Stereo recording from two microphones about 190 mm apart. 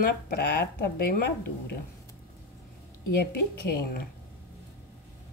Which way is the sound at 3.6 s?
55° left (ahead or behind).